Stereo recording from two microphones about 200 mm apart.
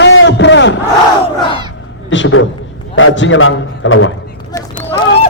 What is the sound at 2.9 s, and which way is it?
A man's voice, 80° left.